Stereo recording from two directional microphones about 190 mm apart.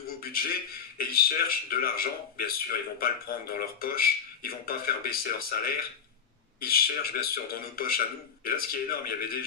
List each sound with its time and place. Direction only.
0.2 s a man's voice: 50° left (ahead or behind)